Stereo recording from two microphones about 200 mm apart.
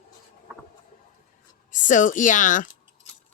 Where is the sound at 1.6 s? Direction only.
40° left (ahead or behind).